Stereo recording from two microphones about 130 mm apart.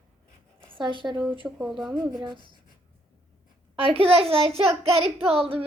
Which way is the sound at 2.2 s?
35° right (ahead or behind).